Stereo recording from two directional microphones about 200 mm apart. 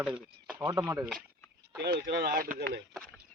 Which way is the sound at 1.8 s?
55° right (ahead or behind).